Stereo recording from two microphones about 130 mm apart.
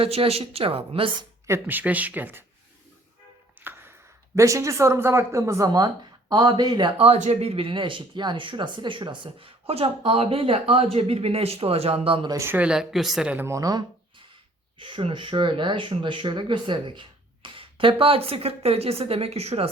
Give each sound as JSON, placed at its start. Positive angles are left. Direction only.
{"t": 0.0, "sound": "speech", "side_deg": -45}
{"t": 1.5, "sound": "speech", "side_deg": -15}
{"t": 3.6, "sound": "a sound", "side_deg": -15}
{"t": 4.4, "sound": "speech", "side_deg": -25}
{"t": 7.2, "sound": "speech", "side_deg": -55}
{"t": 12.3, "sound": "speech", "side_deg": -20}
{"t": 13.4, "sound": "speech", "side_deg": -25}
{"t": 14.8, "sound": "speech", "side_deg": -40}